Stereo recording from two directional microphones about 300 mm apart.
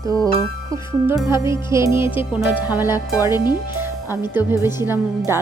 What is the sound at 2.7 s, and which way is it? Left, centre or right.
Speech, centre.